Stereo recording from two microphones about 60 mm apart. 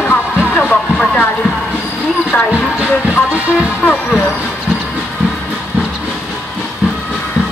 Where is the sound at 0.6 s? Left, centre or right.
Centre.